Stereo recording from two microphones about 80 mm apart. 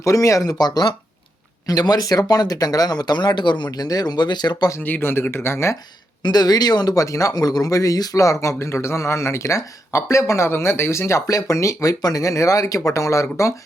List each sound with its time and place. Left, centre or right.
0.0 s speech: left
3.7 s speech: left
4.8 s speech: left
6.2 s speech: left